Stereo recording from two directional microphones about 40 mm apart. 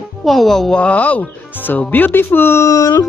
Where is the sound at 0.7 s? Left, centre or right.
Left.